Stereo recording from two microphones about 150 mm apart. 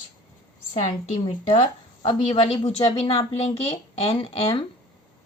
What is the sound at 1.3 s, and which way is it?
A woman's voice, 35° left (ahead or behind).